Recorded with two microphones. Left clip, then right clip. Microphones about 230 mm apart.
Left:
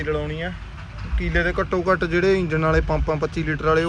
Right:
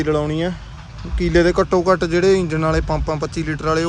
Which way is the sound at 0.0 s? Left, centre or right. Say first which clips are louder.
Right 6 dB; right.